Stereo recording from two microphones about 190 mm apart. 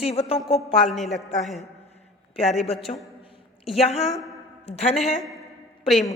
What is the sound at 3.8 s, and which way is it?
Speech, 35° left (ahead or behind).